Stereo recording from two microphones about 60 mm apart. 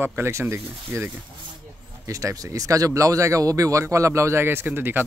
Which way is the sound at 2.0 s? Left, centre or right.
Right.